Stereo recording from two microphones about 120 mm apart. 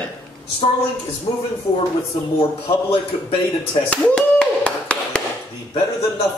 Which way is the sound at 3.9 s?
10° left (ahead or behind).